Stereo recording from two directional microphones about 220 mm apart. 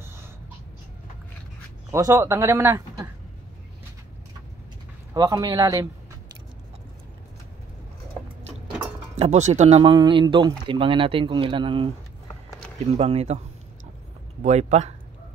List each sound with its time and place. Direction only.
1.9 s a man's voice: 15° right (ahead or behind)
5.1 s a man's voice: 20° right (ahead or behind)
8.5 s a sound: 30° right (ahead or behind)
9.1 s speech: 30° right (ahead or behind)
12.9 s speech: 30° right (ahead or behind)
14.4 s speech: 30° right (ahead or behind)